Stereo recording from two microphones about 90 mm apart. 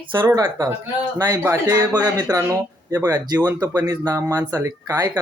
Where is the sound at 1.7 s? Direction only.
40° right (ahead or behind).